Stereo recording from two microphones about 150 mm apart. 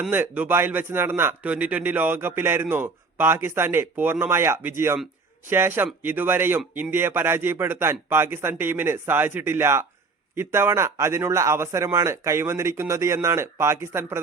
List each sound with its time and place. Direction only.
0.0 s a man's voice: 10° right (ahead or behind)